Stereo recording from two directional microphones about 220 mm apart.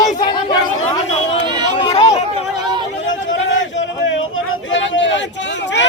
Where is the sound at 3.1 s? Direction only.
60° left (ahead or behind).